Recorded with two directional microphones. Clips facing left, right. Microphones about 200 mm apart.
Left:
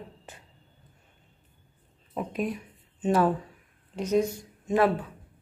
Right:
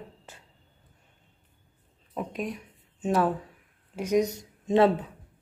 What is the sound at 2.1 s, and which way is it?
Speech, 5° left (ahead or behind).